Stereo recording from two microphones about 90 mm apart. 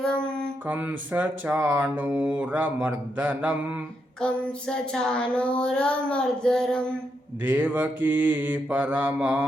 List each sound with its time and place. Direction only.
0.0 s mantra: 10° left (ahead or behind)
0.7 s speech: 20° right (ahead or behind)
4.2 s child singing: 10° left (ahead or behind)
7.4 s speech: 20° right (ahead or behind)